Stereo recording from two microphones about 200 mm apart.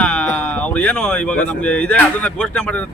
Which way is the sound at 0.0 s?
5° left (ahead or behind).